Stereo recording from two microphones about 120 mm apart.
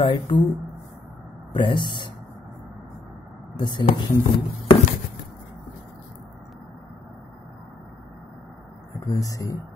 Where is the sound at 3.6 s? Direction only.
40° left (ahead or behind).